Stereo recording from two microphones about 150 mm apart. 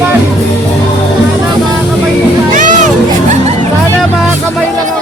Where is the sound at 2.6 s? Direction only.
55° right (ahead or behind).